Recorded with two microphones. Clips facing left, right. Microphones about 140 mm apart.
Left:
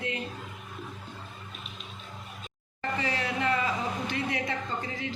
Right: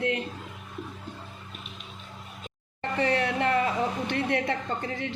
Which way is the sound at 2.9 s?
65° right (ahead or behind).